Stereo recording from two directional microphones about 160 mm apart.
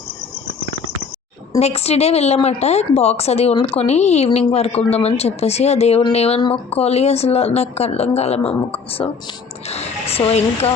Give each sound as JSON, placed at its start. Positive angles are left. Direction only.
{"t": 1.5, "sound": "a woman's voice", "side_deg": 40}